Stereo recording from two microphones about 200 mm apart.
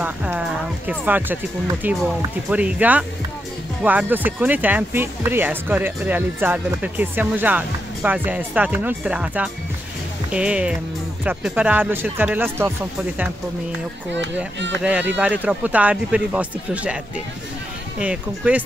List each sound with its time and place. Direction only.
0.0 s speech: 5° right (ahead or behind)
14.1 s speech: 65° right (ahead or behind)
14.8 s speech: 5° right (ahead or behind)